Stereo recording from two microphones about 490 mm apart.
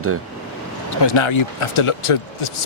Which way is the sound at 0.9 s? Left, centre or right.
Left.